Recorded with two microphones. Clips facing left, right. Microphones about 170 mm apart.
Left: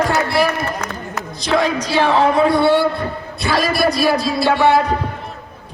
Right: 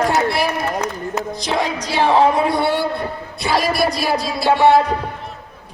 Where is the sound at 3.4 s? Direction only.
15° right (ahead or behind).